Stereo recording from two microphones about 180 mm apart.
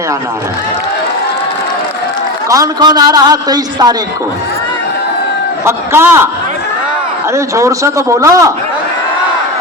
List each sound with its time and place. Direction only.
2.5 s a man's voice: 20° right (ahead or behind)
5.6 s speech: 15° right (ahead or behind)
7.3 s speech: 15° right (ahead or behind)